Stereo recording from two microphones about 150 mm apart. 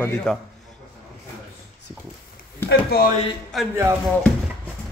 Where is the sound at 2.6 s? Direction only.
90° left.